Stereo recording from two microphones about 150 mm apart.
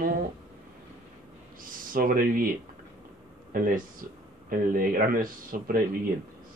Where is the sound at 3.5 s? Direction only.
65° right (ahead or behind).